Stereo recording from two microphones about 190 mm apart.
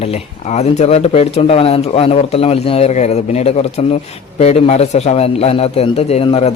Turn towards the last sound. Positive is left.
turn(degrees=30)  # may be behind; listen again after turning